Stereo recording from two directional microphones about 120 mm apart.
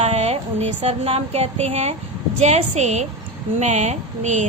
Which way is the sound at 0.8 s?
55° right (ahead or behind).